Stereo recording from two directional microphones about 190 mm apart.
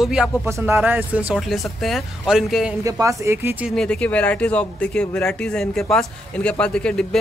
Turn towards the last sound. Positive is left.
turn(degrees=5)  # may be behind; listen again after turning